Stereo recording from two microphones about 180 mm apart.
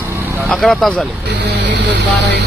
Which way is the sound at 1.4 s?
75° right (ahead or behind).